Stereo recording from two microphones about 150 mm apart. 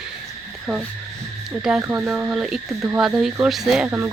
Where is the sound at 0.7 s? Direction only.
Centre (ahead or behind).